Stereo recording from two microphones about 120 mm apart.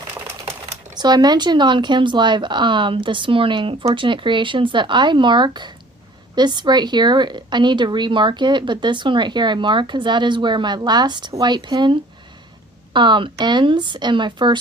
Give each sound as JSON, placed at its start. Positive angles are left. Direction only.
{"t": 0.9, "sound": "a woman's voice", "side_deg": -35}